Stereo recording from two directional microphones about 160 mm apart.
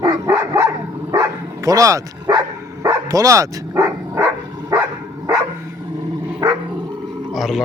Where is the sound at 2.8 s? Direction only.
20° right (ahead or behind).